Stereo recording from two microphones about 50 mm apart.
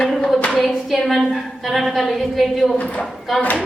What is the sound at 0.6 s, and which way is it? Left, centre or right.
A woman's voice, centre.